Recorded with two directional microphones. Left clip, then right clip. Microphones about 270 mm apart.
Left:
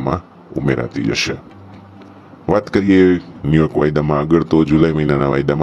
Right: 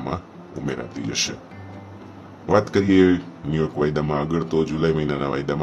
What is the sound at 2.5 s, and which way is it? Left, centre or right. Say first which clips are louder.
Speech: left 4 dB; left.